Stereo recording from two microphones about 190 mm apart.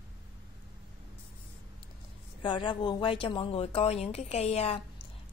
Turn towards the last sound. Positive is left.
turn(degrees=35)  # may be behind; listen again after turning